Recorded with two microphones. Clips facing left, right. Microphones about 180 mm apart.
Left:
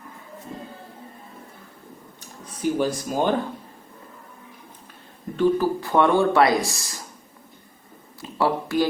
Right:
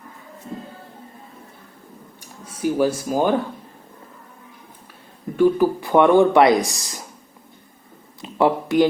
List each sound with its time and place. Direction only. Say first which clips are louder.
2.2 s speech: right 2 dB; 10° right (ahead or behind)
5.4 s speech: right 4 dB; 15° right (ahead or behind)
8.2 s a sound: right 4 dB; 20° right (ahead or behind)